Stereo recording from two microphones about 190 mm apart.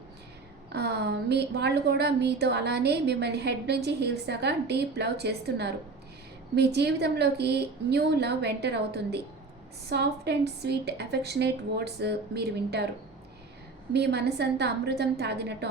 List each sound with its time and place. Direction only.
0.7 s a woman's voice: 60° right (ahead or behind)
6.7 s a woman's voice: 60° right (ahead or behind)
13.9 s a woman's voice: 60° right (ahead or behind)